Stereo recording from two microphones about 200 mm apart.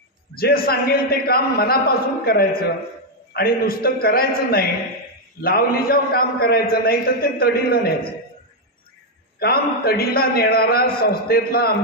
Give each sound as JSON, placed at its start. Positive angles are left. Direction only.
{"t": 0.3, "sound": "a man's voice", "side_deg": 50}
{"t": 9.4, "sound": "a man's voice", "side_deg": 50}